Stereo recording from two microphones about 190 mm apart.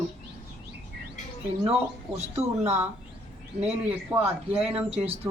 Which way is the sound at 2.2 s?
35° right (ahead or behind).